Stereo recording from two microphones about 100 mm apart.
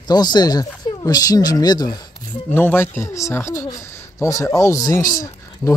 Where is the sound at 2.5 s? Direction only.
20° left (ahead or behind).